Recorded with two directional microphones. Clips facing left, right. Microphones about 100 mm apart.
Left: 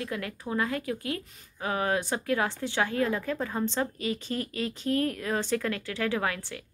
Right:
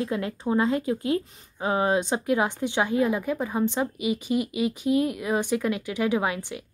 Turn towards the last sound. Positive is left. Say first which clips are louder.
# right 4 dB
turn(degrees=-15)  # may be behind; listen again after turning